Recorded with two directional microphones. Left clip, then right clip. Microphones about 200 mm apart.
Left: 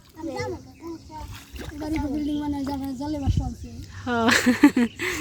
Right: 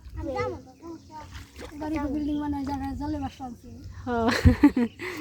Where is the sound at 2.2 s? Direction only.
5° left (ahead or behind).